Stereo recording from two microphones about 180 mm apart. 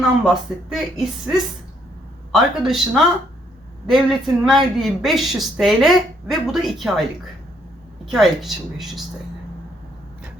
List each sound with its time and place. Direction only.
0.7 s a woman's voice: centre (ahead or behind)
8.0 s a woman's voice: centre (ahead or behind)